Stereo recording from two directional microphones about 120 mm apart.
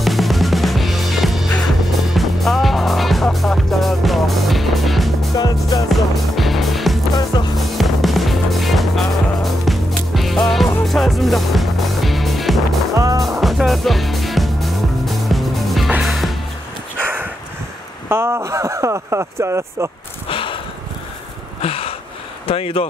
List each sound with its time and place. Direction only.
0.0 s music: centre (ahead or behind)
5.3 s music: 30° left (ahead or behind)
5.9 s music: centre (ahead or behind)
12.9 s music: 30° right (ahead or behind)
13.4 s music: centre (ahead or behind)
18.0 s a sound: 20° right (ahead or behind)
20.2 s a sound: 45° left (ahead or behind)
22.5 s speech: 50° left (ahead or behind)